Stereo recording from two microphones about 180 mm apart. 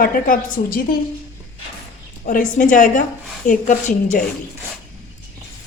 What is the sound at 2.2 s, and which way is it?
A woman's voice, 45° left (ahead or behind).